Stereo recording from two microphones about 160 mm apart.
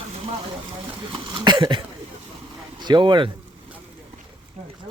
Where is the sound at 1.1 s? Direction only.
30° right (ahead or behind).